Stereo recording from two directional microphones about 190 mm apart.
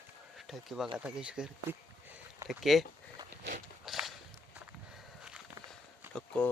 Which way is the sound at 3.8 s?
Centre (ahead or behind).